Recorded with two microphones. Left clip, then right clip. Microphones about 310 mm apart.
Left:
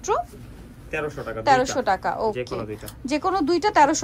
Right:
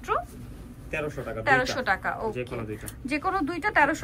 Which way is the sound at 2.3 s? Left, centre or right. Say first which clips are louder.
Left 5 dB; centre.